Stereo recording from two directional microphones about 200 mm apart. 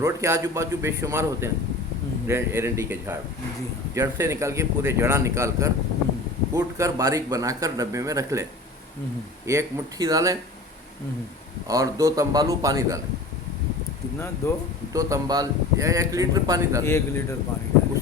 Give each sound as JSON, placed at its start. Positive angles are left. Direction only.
{"t": 0.0, "sound": "speech", "side_deg": -15}
{"t": 9.5, "sound": "speech", "side_deg": -15}
{"t": 11.7, "sound": "speech", "side_deg": -15}
{"t": 14.9, "sound": "speech", "side_deg": -15}
{"t": 16.8, "sound": "speech", "side_deg": 10}